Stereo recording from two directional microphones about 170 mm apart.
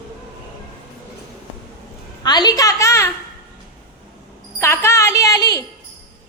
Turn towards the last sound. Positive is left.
turn(degrees=20)  # may be behind; listen again after turning